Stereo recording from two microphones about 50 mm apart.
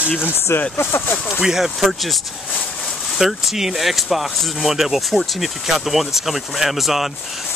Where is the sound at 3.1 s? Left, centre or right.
Centre.